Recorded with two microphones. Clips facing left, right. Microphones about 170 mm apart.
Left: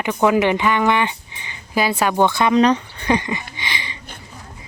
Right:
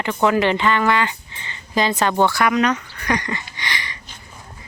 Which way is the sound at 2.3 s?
25° left (ahead or behind).